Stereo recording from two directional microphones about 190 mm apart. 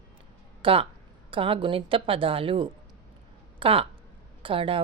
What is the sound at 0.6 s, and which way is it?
Speech, 30° right (ahead or behind).